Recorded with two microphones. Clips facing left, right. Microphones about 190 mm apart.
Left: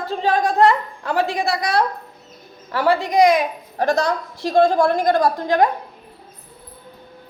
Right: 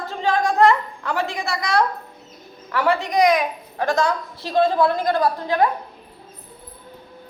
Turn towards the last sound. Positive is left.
turn(degrees=45)  # may be behind; listen again after turning